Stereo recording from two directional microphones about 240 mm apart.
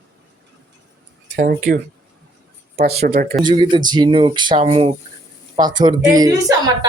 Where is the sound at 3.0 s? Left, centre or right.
Right.